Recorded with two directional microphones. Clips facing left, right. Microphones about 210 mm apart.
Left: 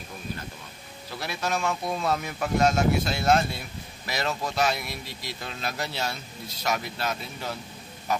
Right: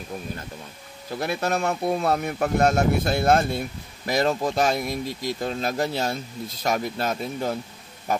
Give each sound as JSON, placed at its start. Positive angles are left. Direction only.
{"t": 1.2, "sound": "a man's voice", "side_deg": -55}